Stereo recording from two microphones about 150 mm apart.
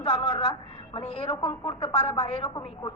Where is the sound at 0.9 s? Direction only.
40° left (ahead or behind).